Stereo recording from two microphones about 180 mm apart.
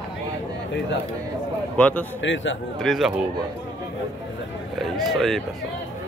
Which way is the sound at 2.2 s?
90° left.